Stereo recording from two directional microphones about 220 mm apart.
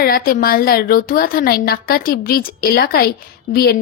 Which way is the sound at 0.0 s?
40° left (ahead or behind).